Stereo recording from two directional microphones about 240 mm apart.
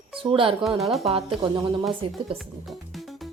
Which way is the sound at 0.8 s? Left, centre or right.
Centre.